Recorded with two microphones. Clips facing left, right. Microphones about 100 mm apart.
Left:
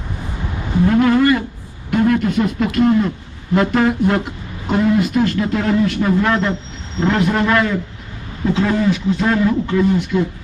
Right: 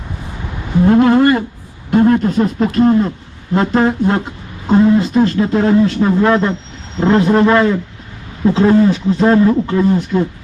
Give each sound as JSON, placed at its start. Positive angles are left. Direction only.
{"t": 0.9, "sound": "a man's voice", "side_deg": -30}